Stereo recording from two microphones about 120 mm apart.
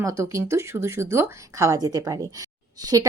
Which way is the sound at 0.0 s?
25° right (ahead or behind).